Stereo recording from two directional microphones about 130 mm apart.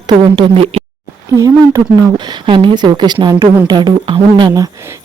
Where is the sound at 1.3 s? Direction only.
25° right (ahead or behind).